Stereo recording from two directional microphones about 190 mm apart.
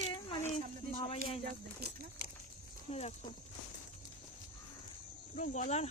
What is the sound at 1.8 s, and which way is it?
Speech, 55° right (ahead or behind).